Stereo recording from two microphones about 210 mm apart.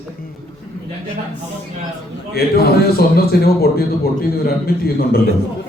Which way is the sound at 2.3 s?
50° left (ahead or behind).